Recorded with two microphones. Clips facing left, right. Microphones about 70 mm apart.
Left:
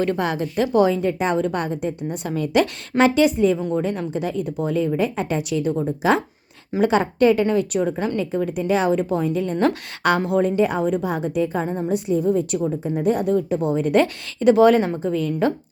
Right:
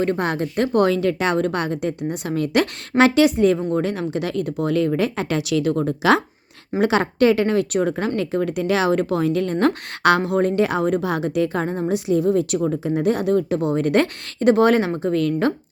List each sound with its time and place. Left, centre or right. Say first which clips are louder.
0.0 s a woman's voice: right 1 dB; right
3.8 s a woman's voice: right 1 dB; right
6.7 s a woman's voice: even; right
12.8 s a woman's voice: right 1 dB; right